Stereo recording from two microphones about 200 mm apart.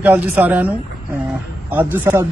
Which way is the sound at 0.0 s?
10° right (ahead or behind).